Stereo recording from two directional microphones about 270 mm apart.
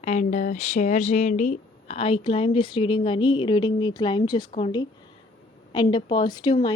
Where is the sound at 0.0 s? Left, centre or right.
Left.